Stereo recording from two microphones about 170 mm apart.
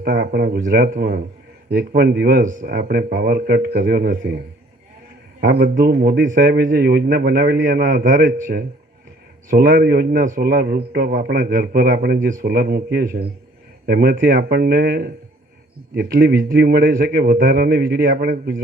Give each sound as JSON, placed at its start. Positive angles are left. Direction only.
{"t": 0.0, "sound": "a man's voice", "side_deg": -55}
{"t": 5.4, "sound": "a man's voice", "side_deg": -60}